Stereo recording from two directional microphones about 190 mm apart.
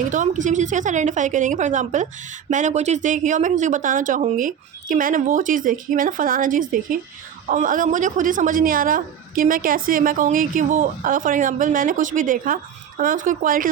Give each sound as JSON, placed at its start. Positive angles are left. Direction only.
{"t": 0.1, "sound": "a woman's voice", "side_deg": -40}